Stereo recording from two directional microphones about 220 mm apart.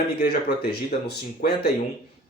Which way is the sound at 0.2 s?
45° left (ahead or behind).